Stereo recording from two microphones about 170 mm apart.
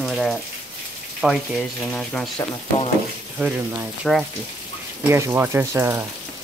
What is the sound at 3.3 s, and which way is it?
Speech, 5° right (ahead or behind).